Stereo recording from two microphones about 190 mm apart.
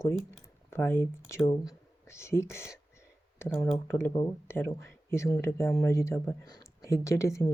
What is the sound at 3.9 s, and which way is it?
Speech, 10° left (ahead or behind).